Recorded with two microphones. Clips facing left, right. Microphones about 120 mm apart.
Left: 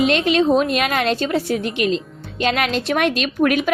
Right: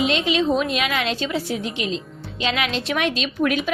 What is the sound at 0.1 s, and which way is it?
A woman's voice, 50° left (ahead or behind).